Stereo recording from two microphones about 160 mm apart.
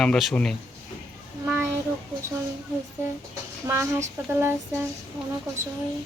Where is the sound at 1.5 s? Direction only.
15° right (ahead or behind).